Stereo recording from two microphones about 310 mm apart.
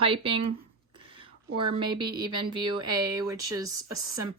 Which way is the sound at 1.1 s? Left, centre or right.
Centre.